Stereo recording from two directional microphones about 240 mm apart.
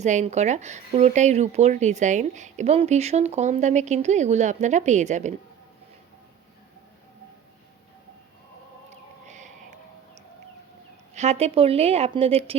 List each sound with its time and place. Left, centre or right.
0.0 s speech: right
9.2 s a sound: right
11.1 s speech: right